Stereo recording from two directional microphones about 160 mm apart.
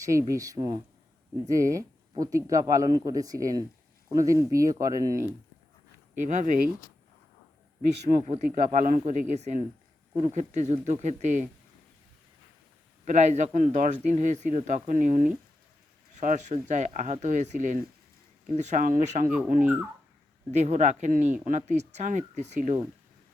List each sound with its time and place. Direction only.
0.0 s speech: 20° right (ahead or behind)
6.1 s speech: 50° right (ahead or behind)
8.1 s speech: 40° right (ahead or behind)
8.7 s speech: 55° right (ahead or behind)
13.1 s speech: 45° right (ahead or behind)
19.5 s speech: 10° right (ahead or behind)
20.5 s speech: 45° right (ahead or behind)